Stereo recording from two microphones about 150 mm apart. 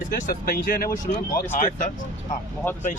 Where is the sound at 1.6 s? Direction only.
55° left (ahead or behind).